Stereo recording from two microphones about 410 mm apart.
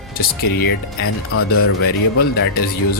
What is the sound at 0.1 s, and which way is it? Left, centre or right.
Speech, left.